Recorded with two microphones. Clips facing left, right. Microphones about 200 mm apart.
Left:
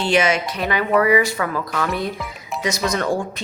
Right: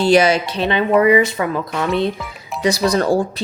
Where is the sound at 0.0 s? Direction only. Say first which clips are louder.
Right 5 dB; 35° right (ahead or behind).